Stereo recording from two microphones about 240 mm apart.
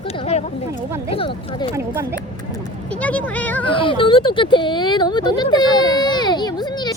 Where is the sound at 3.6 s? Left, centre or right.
Left.